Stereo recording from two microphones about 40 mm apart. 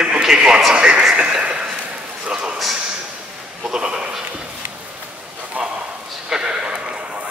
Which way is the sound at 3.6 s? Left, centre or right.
Centre.